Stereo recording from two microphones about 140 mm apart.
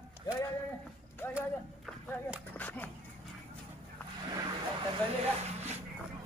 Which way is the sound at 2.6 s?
10° left (ahead or behind).